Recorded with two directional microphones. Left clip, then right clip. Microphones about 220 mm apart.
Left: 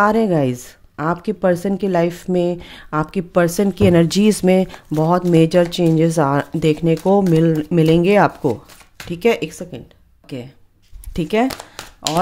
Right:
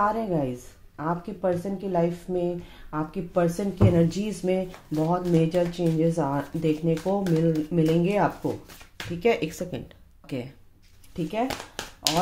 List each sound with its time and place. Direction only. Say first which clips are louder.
0.0 s a woman's voice: left 10 dB; 50° left (ahead or behind)
9.1 s speech: left 7 dB; 30° left (ahead or behind)
9.5 s speech: left 2 dB; 15° left (ahead or behind)
11.1 s a woman's voice: left 10 dB; 50° left (ahead or behind)
11.4 s speech: left 7 dB; 20° left (ahead or behind)